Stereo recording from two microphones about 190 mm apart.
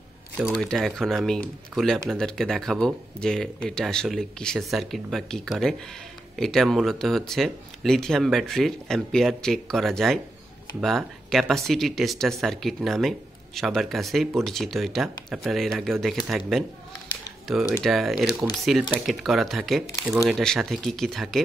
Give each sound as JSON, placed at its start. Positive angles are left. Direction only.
{"t": 0.4, "sound": "speech", "side_deg": 0}